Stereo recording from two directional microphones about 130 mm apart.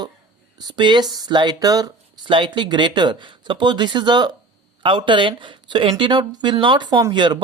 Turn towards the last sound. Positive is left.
turn(degrees=-35)  # may be behind; listen again after turning